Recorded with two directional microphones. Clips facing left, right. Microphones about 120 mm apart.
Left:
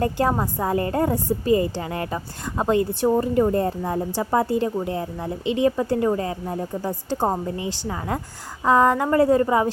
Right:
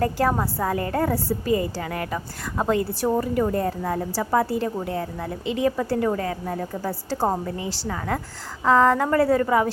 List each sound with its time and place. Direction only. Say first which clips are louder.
0.0 s speech: even; 20° left (ahead or behind)